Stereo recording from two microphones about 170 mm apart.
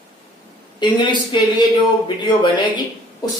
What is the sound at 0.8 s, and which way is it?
Speech, 25° left (ahead or behind).